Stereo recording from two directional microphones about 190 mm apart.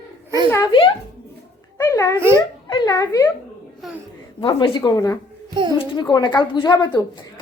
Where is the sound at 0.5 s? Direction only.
20° left (ahead or behind).